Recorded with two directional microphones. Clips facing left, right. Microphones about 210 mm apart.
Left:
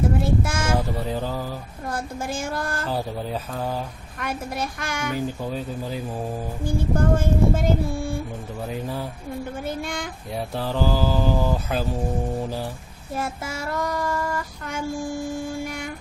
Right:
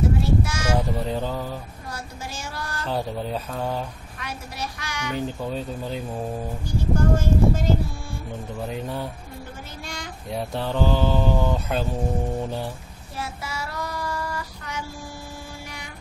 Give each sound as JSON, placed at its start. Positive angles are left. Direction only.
{"t": 0.2, "sound": "child singing", "side_deg": 50}
{"t": 1.0, "sound": "mantra", "side_deg": 5}
{"t": 1.9, "sound": "music", "side_deg": 50}
{"t": 2.9, "sound": "mantra", "side_deg": 0}
{"t": 4.2, "sound": "music", "side_deg": 50}
{"t": 5.1, "sound": "mantra", "side_deg": 5}
{"t": 6.6, "sound": "music", "side_deg": 55}
{"t": 8.6, "sound": "mantra", "side_deg": 0}
{"t": 9.7, "sound": "a woman's voice", "side_deg": 55}
{"t": 10.3, "sound": "mantra", "side_deg": 0}
{"t": 13.1, "sound": "child singing", "side_deg": 50}